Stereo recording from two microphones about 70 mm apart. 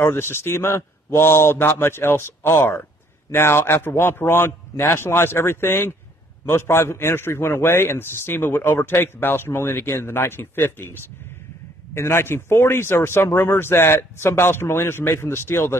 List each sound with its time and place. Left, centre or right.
0.0 s a man's voice: left